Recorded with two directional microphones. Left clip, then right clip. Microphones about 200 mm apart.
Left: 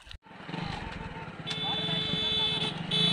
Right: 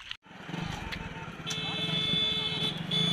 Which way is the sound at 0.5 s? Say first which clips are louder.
Even; 35° right (ahead or behind).